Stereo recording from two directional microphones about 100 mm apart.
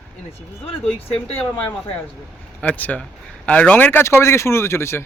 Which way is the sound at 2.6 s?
15° left (ahead or behind).